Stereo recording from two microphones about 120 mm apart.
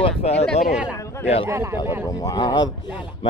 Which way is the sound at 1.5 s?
25° right (ahead or behind).